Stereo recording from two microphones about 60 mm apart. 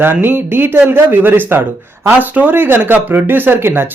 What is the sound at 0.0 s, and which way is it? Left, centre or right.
Speech, right.